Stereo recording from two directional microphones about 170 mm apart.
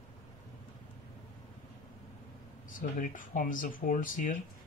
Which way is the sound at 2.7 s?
50° left (ahead or behind).